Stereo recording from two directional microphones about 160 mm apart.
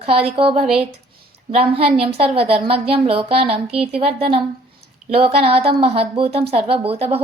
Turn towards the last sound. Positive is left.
turn(degrees=-35)  # may be behind; listen again after turning